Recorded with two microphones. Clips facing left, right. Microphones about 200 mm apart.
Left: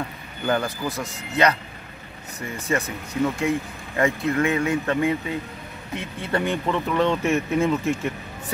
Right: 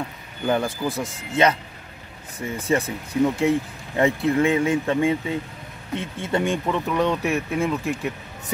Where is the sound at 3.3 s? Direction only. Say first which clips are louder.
Right 3 dB; 25° right (ahead or behind).